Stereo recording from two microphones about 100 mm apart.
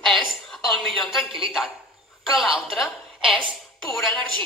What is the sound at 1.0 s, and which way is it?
A woman's voice, centre (ahead or behind).